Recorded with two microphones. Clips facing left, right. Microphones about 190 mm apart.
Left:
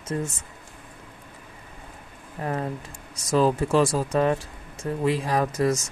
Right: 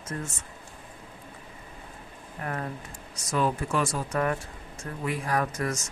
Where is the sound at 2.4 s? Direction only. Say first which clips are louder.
Left 5 dB; 30° left (ahead or behind).